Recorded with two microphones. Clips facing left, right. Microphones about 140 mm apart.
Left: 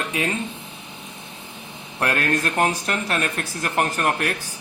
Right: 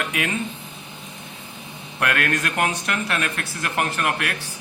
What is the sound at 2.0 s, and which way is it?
Speech, 30° left (ahead or behind).